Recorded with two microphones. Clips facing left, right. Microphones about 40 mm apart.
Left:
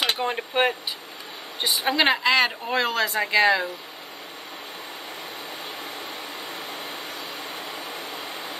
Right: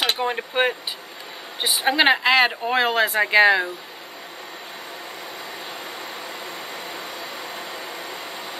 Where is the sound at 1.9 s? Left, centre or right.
Centre.